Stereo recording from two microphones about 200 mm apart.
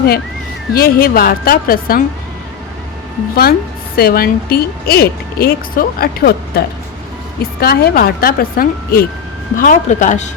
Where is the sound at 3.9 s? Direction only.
50° left (ahead or behind).